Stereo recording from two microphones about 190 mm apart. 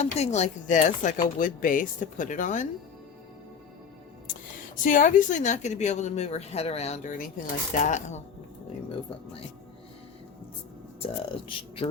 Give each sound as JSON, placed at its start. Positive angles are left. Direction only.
{"t": 0.0, "sound": "speech", "side_deg": 35}
{"t": 4.8, "sound": "speech", "side_deg": 45}
{"t": 11.0, "sound": "speech", "side_deg": 30}